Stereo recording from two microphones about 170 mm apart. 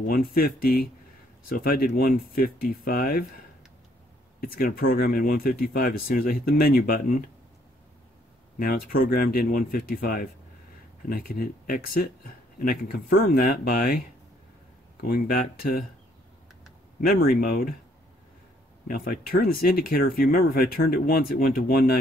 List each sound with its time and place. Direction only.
0.6 s speech: 60° left (ahead or behind)
4.4 s speech: 55° left (ahead or behind)
8.5 s speech: 60° left (ahead or behind)
15.0 s speech: 60° left (ahead or behind)
17.0 s speech: 60° left (ahead or behind)
18.9 s speech: 60° left (ahead or behind)